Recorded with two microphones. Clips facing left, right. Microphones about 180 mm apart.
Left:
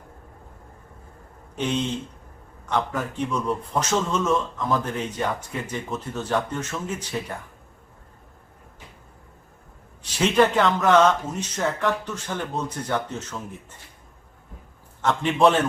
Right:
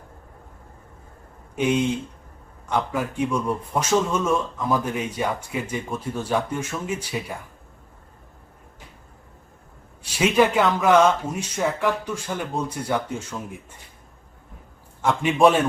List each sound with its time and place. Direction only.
1.5 s speech: 10° right (ahead or behind)
10.0 s speech: 10° right (ahead or behind)
15.0 s speech: 10° right (ahead or behind)